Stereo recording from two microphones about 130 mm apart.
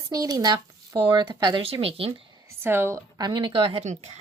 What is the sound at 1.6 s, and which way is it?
Speech, 50° right (ahead or behind).